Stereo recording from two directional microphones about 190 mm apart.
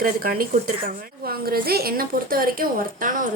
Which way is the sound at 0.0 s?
50° right (ahead or behind).